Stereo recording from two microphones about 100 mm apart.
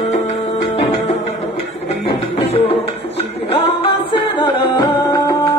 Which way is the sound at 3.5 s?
65° left (ahead or behind).